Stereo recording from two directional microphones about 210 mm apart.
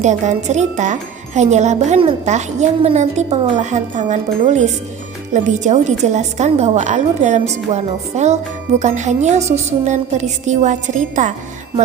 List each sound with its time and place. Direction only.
0.0 s speech: 35° right (ahead or behind)